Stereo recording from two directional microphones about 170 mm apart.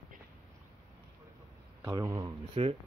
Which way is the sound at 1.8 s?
20° right (ahead or behind).